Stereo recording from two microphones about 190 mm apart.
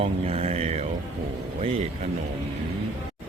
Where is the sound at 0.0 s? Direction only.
30° right (ahead or behind).